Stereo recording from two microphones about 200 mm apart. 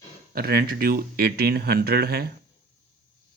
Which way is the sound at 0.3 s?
50° right (ahead or behind).